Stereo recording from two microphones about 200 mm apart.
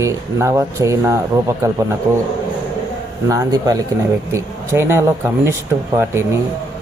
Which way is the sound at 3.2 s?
15° right (ahead or behind).